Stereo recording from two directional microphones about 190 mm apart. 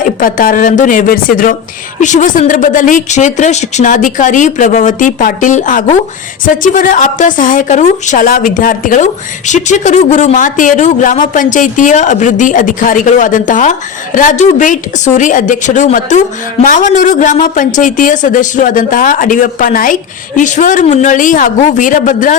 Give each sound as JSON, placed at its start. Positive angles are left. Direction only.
{"t": 0.0, "sound": "speech", "side_deg": 45}